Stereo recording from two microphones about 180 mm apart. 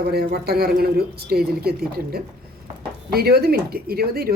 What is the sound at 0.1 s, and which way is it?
Speech, 60° right (ahead or behind).